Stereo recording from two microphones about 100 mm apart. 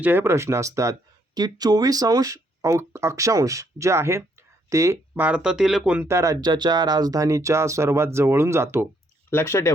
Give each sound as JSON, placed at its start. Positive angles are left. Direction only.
{"t": 0.0, "sound": "speech", "side_deg": -20}
{"t": 5.2, "sound": "speech", "side_deg": -10}
{"t": 6.1, "sound": "speech", "side_deg": -30}
{"t": 9.3, "sound": "speech", "side_deg": 25}